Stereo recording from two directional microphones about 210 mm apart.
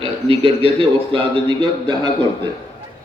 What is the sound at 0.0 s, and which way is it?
A man's voice, 25° right (ahead or behind).